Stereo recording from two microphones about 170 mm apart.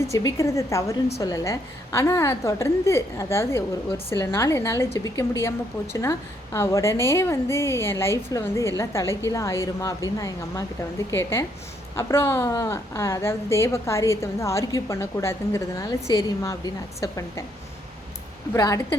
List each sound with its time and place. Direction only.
0.1 s a woman's voice: 20° left (ahead or behind)
18.5 s a woman's voice: 20° left (ahead or behind)